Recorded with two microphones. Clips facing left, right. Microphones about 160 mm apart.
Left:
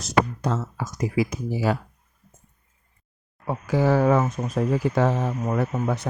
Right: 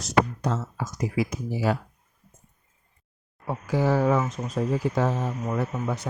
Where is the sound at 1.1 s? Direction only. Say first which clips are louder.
Left 4 dB; 90° left.